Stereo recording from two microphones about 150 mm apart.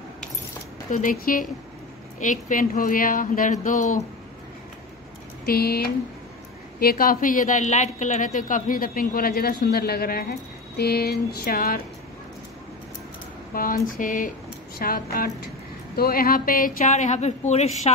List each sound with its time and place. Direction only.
0.9 s speech: 65° left (ahead or behind)
2.1 s speech: 55° left (ahead or behind)
5.4 s speech: 90° left
6.8 s a woman's voice: 80° left
10.8 s a sound: 90° left
13.5 s speech: 70° left (ahead or behind)
14.8 s a woman's voice: 75° left (ahead or behind); by 17.9 s 50° left (ahead or behind)